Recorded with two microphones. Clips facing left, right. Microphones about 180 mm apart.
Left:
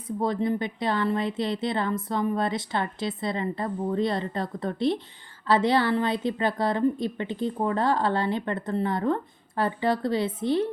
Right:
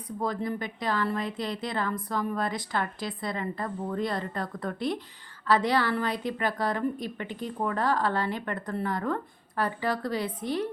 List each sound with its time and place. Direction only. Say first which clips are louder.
0.2 s a woman's voice: left 5 dB; 25° left (ahead or behind)